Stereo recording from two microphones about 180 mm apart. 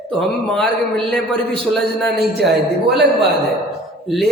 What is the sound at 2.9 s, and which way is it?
Speech, 65° right (ahead or behind).